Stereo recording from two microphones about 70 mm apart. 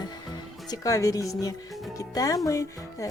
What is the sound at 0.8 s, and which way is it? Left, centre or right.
Speech, left.